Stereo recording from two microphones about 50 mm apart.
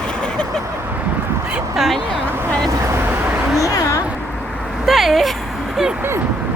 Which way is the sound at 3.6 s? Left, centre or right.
Left.